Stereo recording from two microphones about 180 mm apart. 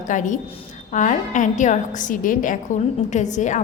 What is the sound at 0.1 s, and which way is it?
A woman's voice, 45° left (ahead or behind).